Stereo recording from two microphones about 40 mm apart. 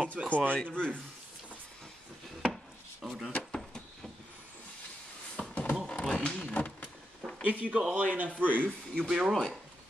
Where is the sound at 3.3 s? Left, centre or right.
Left.